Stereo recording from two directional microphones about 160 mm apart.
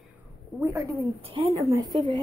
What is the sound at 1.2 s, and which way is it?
Speech, 35° right (ahead or behind).